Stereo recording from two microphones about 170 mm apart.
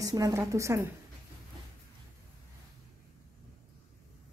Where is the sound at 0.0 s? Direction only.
20° right (ahead or behind).